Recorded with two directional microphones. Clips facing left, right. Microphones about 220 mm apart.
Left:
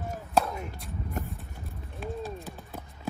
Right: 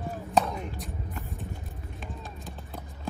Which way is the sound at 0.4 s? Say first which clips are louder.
Right 1 dB; centre (ahead or behind).